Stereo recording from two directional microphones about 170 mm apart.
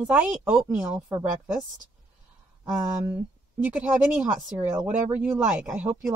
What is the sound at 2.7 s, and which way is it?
Speech, 15° right (ahead or behind).